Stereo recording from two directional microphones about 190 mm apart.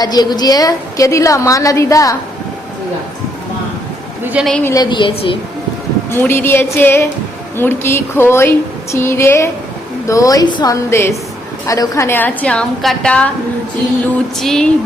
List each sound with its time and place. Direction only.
0.0 s a woman's voice: 20° left (ahead or behind)
4.2 s a woman's voice: 10° right (ahead or behind)
4.4 s music: 5° left (ahead or behind)
4.7 s speech: 20° left (ahead or behind)
6.1 s a woman's voice: 10° left (ahead or behind)
14.3 s music: centre (ahead or behind)